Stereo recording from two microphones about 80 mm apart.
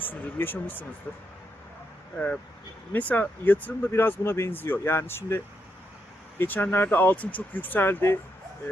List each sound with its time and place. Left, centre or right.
0.0 s speech: left
6.4 s speech: left